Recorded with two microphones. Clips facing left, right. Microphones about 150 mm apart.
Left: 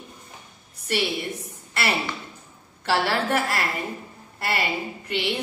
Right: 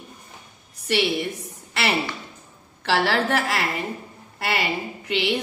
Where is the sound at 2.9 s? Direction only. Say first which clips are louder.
Right 1 dB; 90° right.